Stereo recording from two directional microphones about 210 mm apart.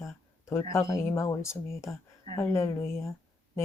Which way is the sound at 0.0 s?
15° left (ahead or behind).